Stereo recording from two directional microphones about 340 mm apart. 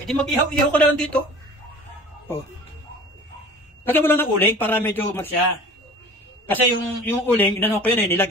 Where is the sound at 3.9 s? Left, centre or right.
Centre.